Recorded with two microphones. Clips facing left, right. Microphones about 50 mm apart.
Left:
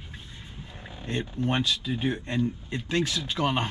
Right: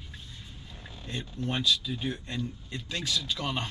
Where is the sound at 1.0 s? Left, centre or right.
Left.